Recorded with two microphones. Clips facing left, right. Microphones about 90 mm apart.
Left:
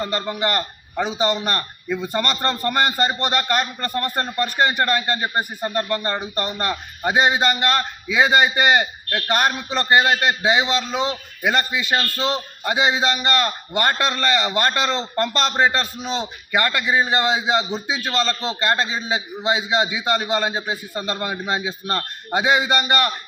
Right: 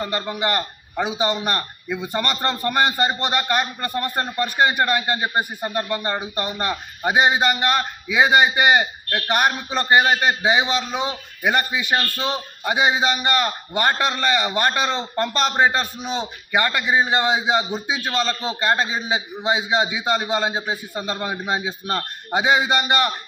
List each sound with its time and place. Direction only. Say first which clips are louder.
0.0 s a man's voice: left 1 dB; 15° right (ahead or behind)